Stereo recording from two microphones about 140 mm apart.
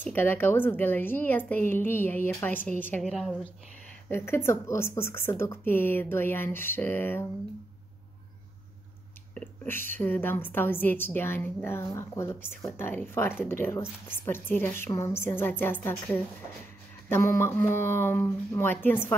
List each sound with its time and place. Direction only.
0.0 s a woman's voice: 15° left (ahead or behind)
3.0 s a woman's voice: centre (ahead or behind)
4.1 s a woman's voice: 15° left (ahead or behind)
9.3 s a woman's voice: 10° left (ahead or behind)